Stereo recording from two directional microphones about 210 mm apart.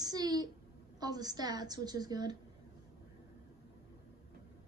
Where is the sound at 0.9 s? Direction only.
20° right (ahead or behind).